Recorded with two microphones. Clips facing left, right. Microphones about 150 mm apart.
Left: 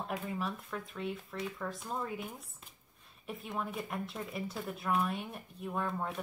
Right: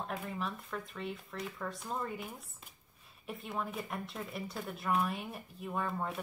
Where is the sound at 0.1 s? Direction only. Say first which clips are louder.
Left 2 dB; centre (ahead or behind).